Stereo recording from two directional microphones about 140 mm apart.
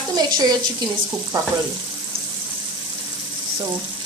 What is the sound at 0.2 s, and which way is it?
Speech, 30° right (ahead or behind).